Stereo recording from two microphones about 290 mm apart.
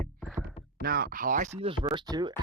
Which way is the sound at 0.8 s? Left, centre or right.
Right.